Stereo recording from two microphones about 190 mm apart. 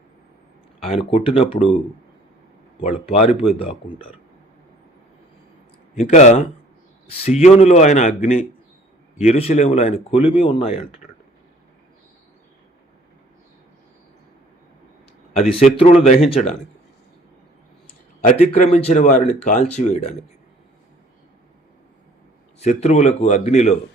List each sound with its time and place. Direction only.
1.1 s speech: 30° left (ahead or behind)
2.8 s speech: 30° left (ahead or behind)
6.0 s speech: 35° left (ahead or behind)
15.3 s speech: 30° left (ahead or behind)
18.3 s speech: 40° left (ahead or behind)
22.6 s speech: 40° left (ahead or behind)